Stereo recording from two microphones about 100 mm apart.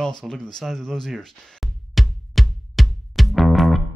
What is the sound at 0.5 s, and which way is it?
Music, 5° left (ahead or behind).